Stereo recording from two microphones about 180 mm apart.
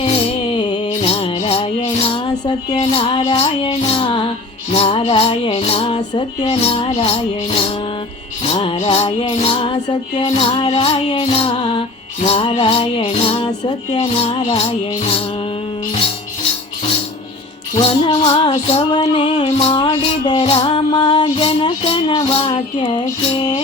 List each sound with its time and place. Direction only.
0.0 s music: 30° left (ahead or behind)
8.4 s music: 30° left (ahead or behind)
17.7 s music: 30° left (ahead or behind)